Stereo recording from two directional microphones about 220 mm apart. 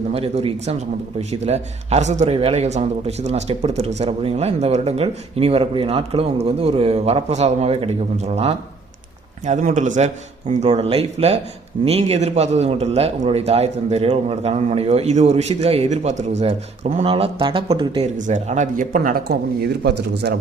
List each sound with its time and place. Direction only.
0.1 s a man's voice: 25° right (ahead or behind); by 20.4 s 50° right (ahead or behind)